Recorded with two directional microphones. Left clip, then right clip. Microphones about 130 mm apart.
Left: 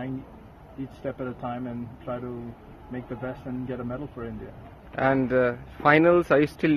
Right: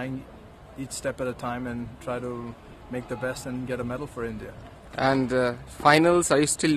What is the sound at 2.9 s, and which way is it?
Speech, 35° right (ahead or behind).